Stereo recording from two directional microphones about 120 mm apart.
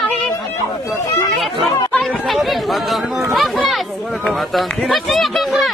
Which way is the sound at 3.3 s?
Centre (ahead or behind).